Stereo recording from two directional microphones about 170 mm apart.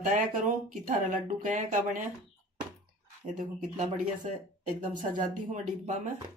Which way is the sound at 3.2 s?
45° right (ahead or behind).